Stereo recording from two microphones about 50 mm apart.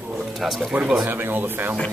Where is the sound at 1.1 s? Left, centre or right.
Right.